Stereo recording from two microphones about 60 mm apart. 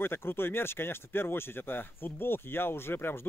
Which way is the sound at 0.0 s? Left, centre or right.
Left.